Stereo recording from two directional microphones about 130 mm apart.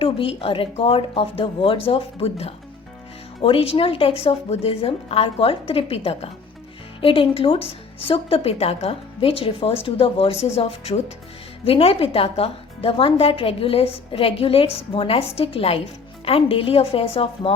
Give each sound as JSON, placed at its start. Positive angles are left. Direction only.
{"t": 0.0, "sound": "a woman's voice", "side_deg": 45}